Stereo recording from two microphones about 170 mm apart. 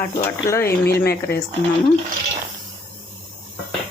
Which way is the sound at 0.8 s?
70° left (ahead or behind).